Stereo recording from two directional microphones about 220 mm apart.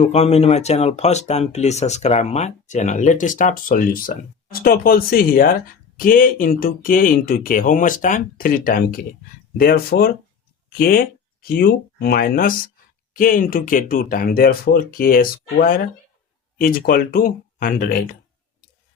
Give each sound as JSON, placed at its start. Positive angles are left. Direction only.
{"t": 0.0, "sound": "speech", "side_deg": 30}